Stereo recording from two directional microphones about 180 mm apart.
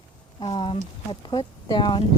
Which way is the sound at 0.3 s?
30° left (ahead or behind).